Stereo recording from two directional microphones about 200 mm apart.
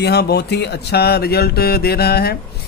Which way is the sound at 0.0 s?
55° left (ahead or behind).